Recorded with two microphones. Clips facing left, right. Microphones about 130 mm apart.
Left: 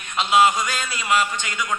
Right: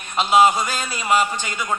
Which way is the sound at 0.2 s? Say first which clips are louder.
Right 2 dB; 35° right (ahead or behind).